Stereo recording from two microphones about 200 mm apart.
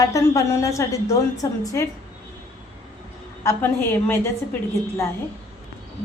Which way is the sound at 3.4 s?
10° left (ahead or behind).